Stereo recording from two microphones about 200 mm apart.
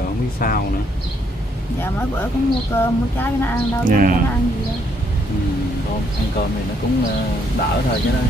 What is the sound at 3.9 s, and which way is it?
Speech, 45° right (ahead or behind).